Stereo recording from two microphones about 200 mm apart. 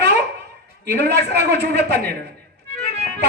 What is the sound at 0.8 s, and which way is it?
A man's voice, 55° right (ahead or behind).